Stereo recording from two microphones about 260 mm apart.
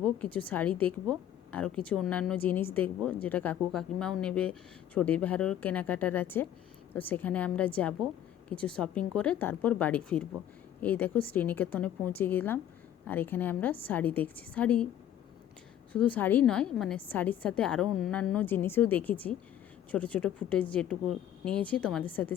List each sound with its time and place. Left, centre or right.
0.0 s a woman's voice: centre
15.9 s a woman's voice: centre